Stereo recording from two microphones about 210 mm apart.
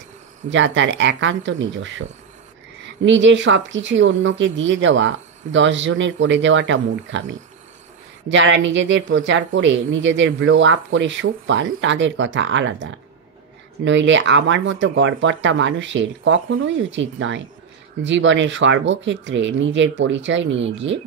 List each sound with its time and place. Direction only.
0.5 s a woman's voice: 60° right (ahead or behind)
3.1 s a woman's voice: 60° right (ahead or behind)